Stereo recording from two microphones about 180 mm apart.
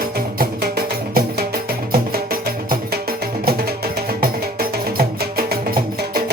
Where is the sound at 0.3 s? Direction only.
55° right (ahead or behind).